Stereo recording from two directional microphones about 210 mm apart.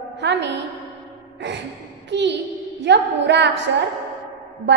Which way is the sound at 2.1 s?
55° right (ahead or behind).